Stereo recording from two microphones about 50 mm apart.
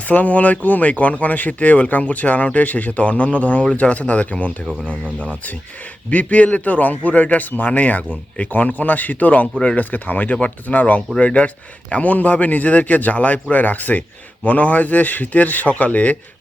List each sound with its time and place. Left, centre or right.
0.1 s speech: left
5.0 s speech: right
6.1 s speech: left